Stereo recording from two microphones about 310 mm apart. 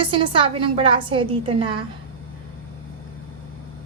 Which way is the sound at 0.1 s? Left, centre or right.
Centre.